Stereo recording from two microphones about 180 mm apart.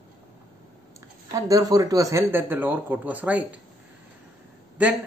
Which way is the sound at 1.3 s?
20° right (ahead or behind).